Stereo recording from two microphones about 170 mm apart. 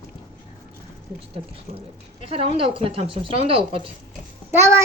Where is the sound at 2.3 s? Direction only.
35° right (ahead or behind).